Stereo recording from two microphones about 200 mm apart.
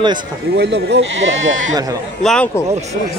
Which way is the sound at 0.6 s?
65° right (ahead or behind).